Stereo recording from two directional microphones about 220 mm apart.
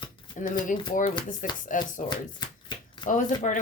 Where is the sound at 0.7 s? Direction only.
35° left (ahead or behind).